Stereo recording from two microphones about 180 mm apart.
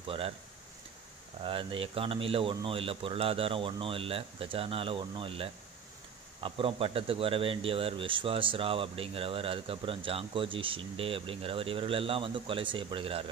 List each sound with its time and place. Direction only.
0.0 s speech: 30° right (ahead or behind)
1.4 s speech: 30° right (ahead or behind)